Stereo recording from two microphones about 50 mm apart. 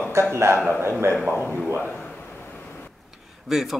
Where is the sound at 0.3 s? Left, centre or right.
Right.